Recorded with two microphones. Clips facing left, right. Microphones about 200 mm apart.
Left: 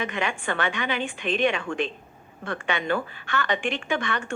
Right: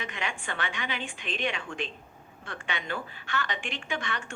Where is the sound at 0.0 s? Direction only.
60° left (ahead or behind).